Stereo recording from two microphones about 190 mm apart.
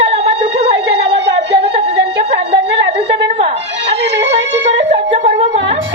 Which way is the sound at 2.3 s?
30° right (ahead or behind).